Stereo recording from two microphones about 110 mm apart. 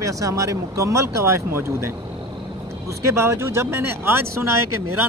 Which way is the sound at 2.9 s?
25° right (ahead or behind).